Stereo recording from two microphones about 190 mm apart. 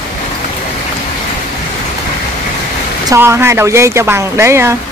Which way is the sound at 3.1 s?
15° right (ahead or behind).